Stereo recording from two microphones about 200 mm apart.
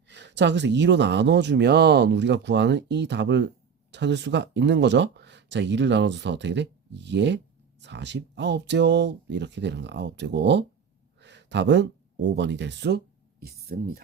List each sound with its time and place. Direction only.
0.1 s speech: 60° right (ahead or behind)
13.4 s speech: 50° right (ahead or behind)